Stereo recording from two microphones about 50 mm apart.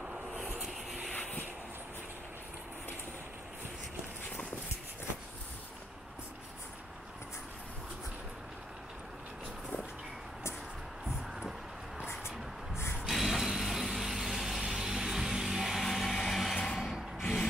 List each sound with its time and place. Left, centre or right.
1.1 s a sound: left
13.1 s vehicle: centre
14.6 s music: centre
16.7 s rub: centre